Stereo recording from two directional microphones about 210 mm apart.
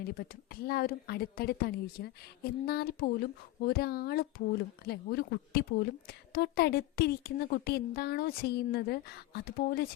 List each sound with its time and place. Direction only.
0.1 s a woman's voice: 45° left (ahead or behind)